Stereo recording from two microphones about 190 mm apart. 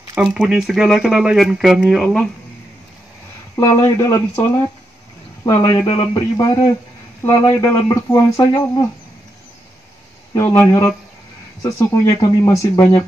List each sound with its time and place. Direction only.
0.1 s speech: 5° right (ahead or behind)
3.5 s speech: 10° left (ahead or behind)
10.3 s speech: 15° left (ahead or behind)
12.2 s speech: 25° left (ahead or behind)